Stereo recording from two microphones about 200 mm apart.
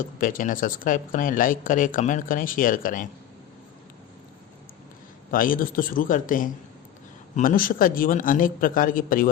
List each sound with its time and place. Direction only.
0.0 s speech: 45° left (ahead or behind)
5.3 s speech: 45° left (ahead or behind)